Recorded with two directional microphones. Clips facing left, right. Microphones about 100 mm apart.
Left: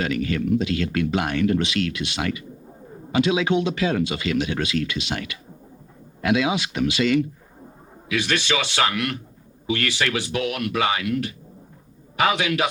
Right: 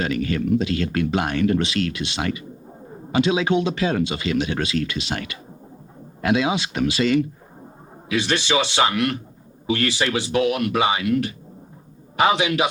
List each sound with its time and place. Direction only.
0.2 s speech: 35° right (ahead or behind)
6.2 s speech: 30° right (ahead or behind)
11.1 s speech: 35° right (ahead or behind)
12.1 s speech: 25° right (ahead or behind)